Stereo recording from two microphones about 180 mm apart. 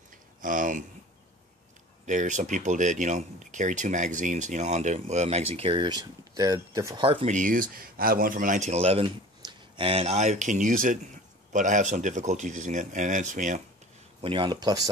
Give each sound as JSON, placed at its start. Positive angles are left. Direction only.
{"t": 0.4, "sound": "speech", "side_deg": -45}
{"t": 2.0, "sound": "speech", "side_deg": -45}
{"t": 7.1, "sound": "speech", "side_deg": -30}
{"t": 7.3, "sound": "speech", "side_deg": -50}
{"t": 14.2, "sound": "speech", "side_deg": -30}